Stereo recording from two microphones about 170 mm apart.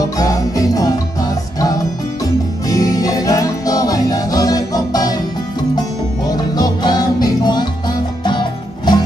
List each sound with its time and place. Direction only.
0.2 s jingle bell: 20° left (ahead or behind)
2.7 s music: 20° left (ahead or behind)
6.5 s music: 25° left (ahead or behind)